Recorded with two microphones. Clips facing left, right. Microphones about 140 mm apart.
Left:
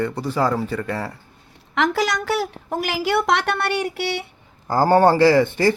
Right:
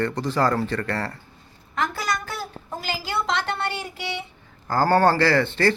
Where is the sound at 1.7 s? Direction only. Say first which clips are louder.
Left 6 dB; 90° left; by 4.2 s 70° left (ahead or behind).